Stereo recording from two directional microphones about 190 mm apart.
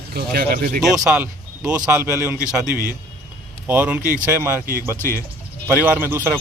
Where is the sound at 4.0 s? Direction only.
50° right (ahead or behind).